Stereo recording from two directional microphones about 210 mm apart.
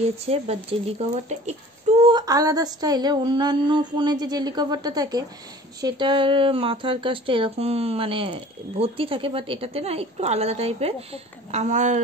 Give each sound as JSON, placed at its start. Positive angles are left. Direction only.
{"t": 0.2, "sound": "speech", "side_deg": -30}